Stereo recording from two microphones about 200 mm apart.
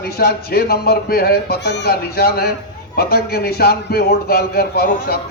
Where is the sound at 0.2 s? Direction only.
50° left (ahead or behind).